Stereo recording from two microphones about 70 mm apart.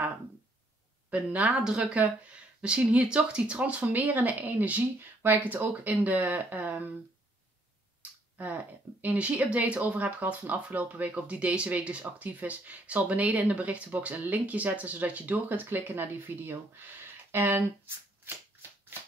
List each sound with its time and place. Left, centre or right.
1.1 s speech: centre
8.4 s speech: right